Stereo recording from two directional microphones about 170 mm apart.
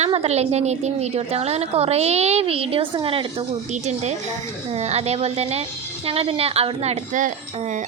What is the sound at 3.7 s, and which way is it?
A woman's voice, 40° right (ahead or behind).